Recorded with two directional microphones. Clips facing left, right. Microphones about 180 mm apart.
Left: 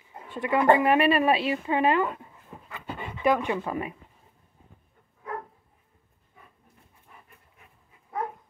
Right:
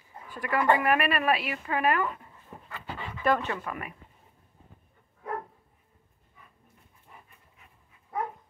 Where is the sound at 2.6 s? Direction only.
20° left (ahead or behind).